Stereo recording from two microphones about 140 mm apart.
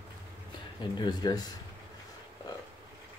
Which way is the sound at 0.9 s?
30° left (ahead or behind).